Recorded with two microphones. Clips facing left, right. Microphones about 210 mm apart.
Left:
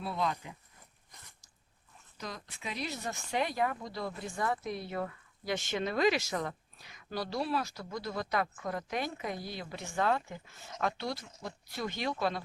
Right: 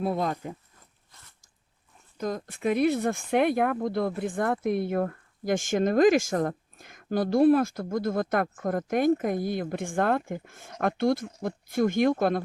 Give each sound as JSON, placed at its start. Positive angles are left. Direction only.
{"t": 0.0, "sound": "speech", "side_deg": -50}
{"t": 2.1, "sound": "speech", "side_deg": -50}